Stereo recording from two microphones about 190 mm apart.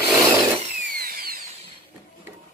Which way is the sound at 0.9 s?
50° right (ahead or behind).